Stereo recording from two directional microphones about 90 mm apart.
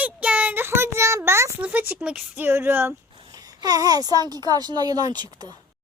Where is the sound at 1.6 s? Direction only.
20° right (ahead or behind).